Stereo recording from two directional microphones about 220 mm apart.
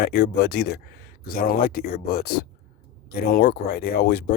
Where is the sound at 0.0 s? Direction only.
45° left (ahead or behind).